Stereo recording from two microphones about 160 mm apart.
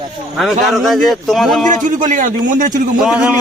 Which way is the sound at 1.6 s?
55° right (ahead or behind).